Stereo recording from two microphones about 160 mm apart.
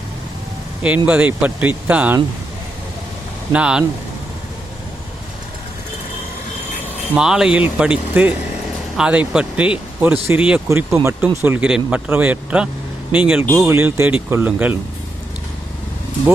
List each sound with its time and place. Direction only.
0.8 s speech: 10° right (ahead or behind)
3.5 s speech: 5° right (ahead or behind)
7.1 s speech: 5° right (ahead or behind)
13.5 s speech: 20° right (ahead or behind)